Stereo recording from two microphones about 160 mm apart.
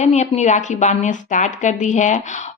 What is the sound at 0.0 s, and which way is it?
Speech, 45° left (ahead or behind).